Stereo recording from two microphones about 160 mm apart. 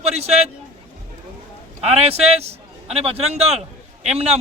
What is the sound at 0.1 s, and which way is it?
Speech, 40° right (ahead or behind).